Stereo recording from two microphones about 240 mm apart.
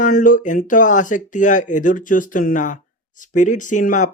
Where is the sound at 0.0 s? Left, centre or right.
Left.